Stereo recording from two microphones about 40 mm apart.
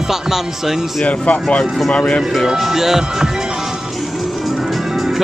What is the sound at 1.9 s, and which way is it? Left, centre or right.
Speech, left.